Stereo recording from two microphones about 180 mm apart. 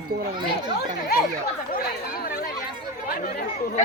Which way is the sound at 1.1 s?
60° left (ahead or behind).